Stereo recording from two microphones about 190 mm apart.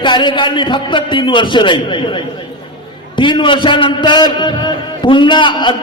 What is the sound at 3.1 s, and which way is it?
A man's voice, 25° left (ahead or behind).